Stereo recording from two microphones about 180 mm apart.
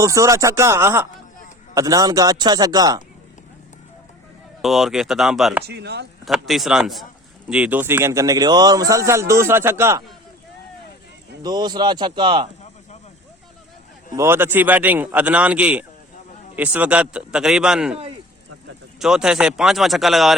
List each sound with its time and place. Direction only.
0.0 s a man's voice: 15° right (ahead or behind)
4.6 s a man's voice: centre (ahead or behind)
5.6 s speech: 65° right (ahead or behind)
6.2 s a man's voice: centre (ahead or behind)
11.4 s a man's voice: 25° right (ahead or behind)
14.2 s a man's voice: 15° right (ahead or behind)
18.9 s a man's voice: 5° right (ahead or behind)